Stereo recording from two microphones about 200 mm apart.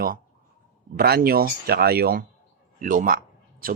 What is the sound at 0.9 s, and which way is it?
Speech, 50° right (ahead or behind).